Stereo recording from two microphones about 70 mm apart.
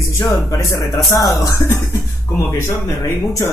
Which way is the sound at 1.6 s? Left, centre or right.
Left.